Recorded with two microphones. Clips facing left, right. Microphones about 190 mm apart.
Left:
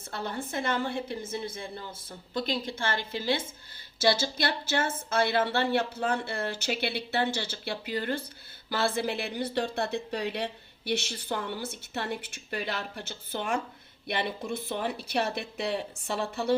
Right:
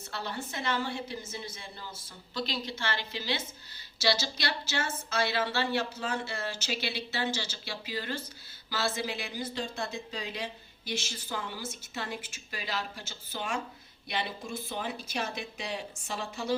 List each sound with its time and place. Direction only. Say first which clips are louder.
0.1 s a woman's voice: left 4 dB; 50° left (ahead or behind)